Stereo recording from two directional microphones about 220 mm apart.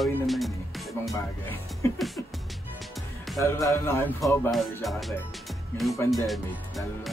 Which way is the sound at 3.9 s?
10° left (ahead or behind).